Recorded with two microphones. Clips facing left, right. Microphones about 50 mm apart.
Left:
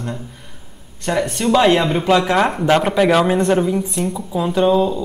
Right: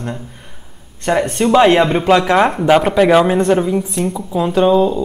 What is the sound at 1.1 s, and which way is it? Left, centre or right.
Speech, right.